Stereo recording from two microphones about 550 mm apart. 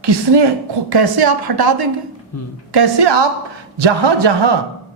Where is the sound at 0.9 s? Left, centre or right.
Right.